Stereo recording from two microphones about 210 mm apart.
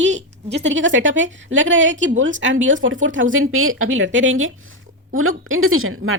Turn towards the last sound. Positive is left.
turn(degrees=-75)  # may be behind; listen again after turning